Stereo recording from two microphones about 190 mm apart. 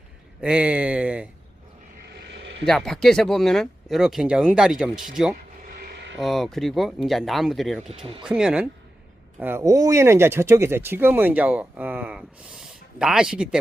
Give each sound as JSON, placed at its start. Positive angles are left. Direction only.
{"t": 0.4, "sound": "speech", "side_deg": -5}
{"t": 2.6, "sound": "speech", "side_deg": 0}
{"t": 5.6, "sound": "mechanisms", "side_deg": -60}
{"t": 6.1, "sound": "speech", "side_deg": 0}